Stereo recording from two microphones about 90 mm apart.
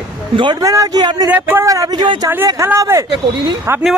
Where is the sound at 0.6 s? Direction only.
40° right (ahead or behind).